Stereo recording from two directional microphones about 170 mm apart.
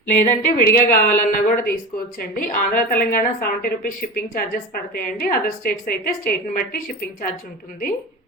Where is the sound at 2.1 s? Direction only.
55° left (ahead or behind).